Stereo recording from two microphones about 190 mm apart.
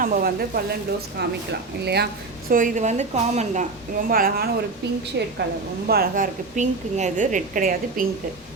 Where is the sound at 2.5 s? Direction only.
45° right (ahead or behind).